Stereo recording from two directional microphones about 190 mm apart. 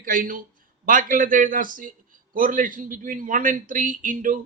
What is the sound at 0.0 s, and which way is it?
Speech, 45° right (ahead or behind).